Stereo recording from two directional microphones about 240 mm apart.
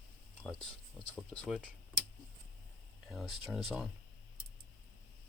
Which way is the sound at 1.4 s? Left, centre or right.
Centre.